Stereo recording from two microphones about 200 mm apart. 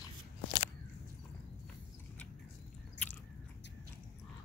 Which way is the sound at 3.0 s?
60° left (ahead or behind).